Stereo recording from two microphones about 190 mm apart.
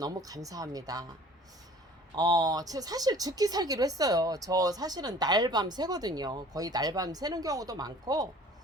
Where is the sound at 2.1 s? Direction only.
20° right (ahead or behind).